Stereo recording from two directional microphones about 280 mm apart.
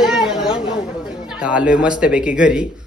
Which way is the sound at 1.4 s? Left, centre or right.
Centre.